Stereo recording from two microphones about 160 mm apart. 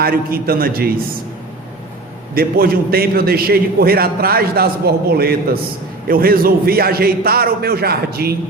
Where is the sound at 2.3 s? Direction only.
70° right (ahead or behind).